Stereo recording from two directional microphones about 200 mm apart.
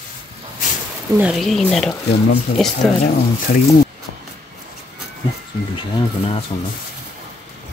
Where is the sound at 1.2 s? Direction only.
Centre (ahead or behind).